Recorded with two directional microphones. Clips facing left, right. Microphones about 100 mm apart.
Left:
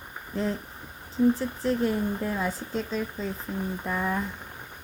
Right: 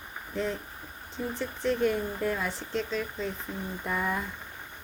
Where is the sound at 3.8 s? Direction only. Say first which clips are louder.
Even; 15° left (ahead or behind).